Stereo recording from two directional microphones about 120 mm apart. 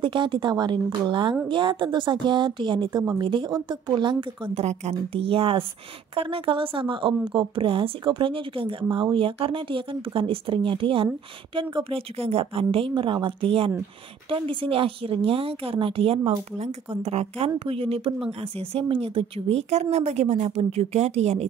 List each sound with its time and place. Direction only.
0.0 s a woman's voice: 45° right (ahead or behind)
4.6 s a woman's voice: 65° right (ahead or behind)